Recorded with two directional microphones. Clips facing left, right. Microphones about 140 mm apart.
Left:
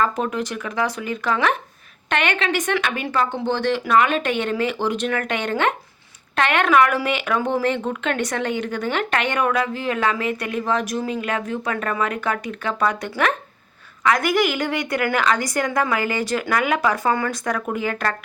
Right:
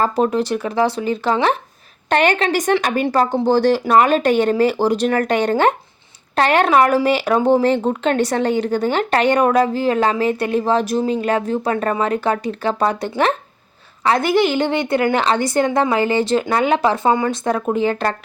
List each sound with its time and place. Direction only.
0.0 s a woman's voice: 35° right (ahead or behind)